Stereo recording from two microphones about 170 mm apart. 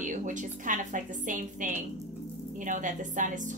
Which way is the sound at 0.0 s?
50° right (ahead or behind).